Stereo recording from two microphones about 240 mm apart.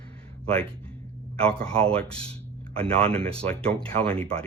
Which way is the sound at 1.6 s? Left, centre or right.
Centre.